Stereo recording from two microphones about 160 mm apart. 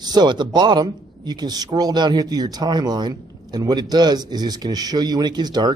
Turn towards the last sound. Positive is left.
turn(degrees=-25)  # may be behind; listen again after turning